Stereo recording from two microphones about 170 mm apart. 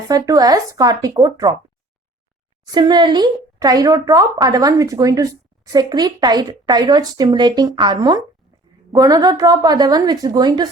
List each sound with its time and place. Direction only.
0.1 s a woman's voice: 20° right (ahead or behind)
2.7 s a woman's voice: 25° right (ahead or behind)